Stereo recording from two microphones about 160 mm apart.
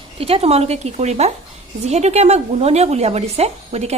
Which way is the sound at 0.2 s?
40° right (ahead or behind).